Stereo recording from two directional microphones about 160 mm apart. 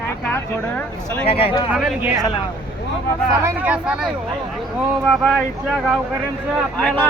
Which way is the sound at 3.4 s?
10° right (ahead or behind).